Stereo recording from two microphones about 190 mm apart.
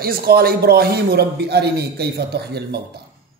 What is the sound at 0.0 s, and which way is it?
Speech, 50° right (ahead or behind).